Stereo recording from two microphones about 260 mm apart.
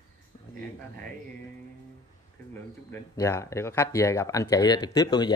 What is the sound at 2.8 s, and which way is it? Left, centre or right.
Speech, centre.